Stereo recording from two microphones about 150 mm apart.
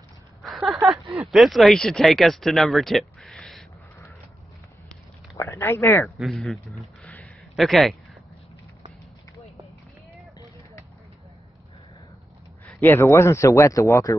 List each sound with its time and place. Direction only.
0.4 s a sound: centre (ahead or behind)
1.2 s speech: centre (ahead or behind)
5.4 s speech: 15° left (ahead or behind)
6.0 s speech: centre (ahead or behind)
7.1 s a sound: 10° left (ahead or behind)
7.5 s speech: centre (ahead or behind)
12.6 s speech: 15° left (ahead or behind)